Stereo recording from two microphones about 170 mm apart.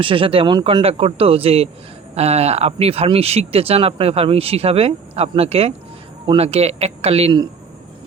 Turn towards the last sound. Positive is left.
turn(degrees=-30)  # may be behind; listen again after turning